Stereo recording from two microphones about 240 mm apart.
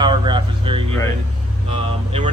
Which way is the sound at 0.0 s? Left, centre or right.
Centre.